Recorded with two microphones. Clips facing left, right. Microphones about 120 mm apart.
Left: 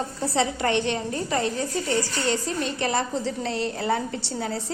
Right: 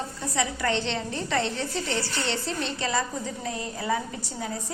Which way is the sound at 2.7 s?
60° left (ahead or behind).